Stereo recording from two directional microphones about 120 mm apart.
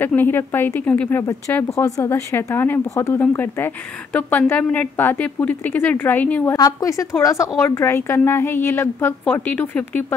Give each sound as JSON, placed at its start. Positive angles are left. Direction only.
{"t": 0.0, "sound": "speech", "side_deg": 15}
{"t": 6.5, "sound": "a woman's voice", "side_deg": 30}